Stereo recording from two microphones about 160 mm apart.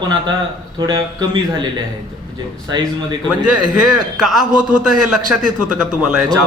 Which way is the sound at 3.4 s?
5° right (ahead or behind).